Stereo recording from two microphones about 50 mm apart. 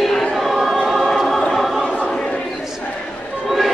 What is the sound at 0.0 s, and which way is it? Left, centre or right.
Choir, centre.